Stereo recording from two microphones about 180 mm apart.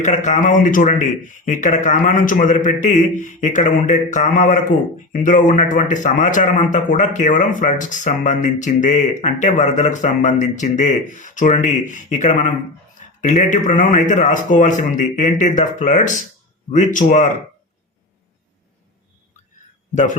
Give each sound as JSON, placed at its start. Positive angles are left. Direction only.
{"t": 0.0, "sound": "speech", "side_deg": 40}